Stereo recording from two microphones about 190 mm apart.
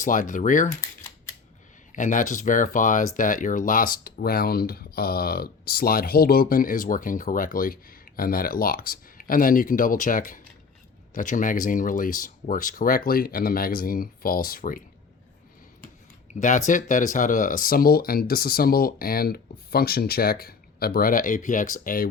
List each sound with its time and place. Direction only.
0.0 s speech: 45° left (ahead or behind)
1.9 s speech: 40° left (ahead or behind)
16.3 s speech: 40° left (ahead or behind)